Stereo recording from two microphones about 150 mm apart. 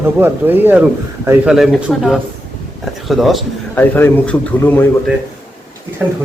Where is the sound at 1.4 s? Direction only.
Centre (ahead or behind).